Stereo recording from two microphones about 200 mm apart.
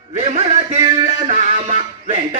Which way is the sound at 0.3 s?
35° right (ahead or behind).